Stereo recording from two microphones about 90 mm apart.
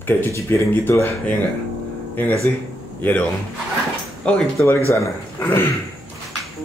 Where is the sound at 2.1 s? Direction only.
20° left (ahead or behind).